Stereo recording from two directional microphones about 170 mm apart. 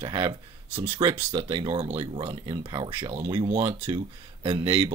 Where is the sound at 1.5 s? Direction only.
25° right (ahead or behind).